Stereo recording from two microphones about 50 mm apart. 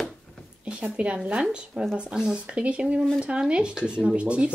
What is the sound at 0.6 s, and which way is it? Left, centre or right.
Speech, centre.